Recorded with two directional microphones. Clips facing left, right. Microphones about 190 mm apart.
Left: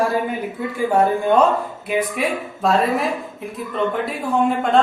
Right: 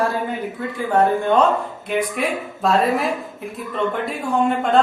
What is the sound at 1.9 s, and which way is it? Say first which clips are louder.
A man's voice: left 1 dB; centre (ahead or behind).